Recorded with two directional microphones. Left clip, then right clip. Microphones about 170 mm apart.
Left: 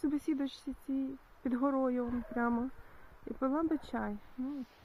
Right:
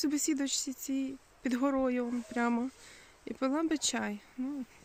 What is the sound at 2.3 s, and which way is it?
Speech, 30° right (ahead or behind).